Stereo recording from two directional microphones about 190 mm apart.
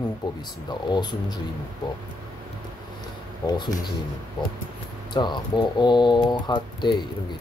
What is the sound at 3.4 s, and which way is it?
Speech, 20° left (ahead or behind).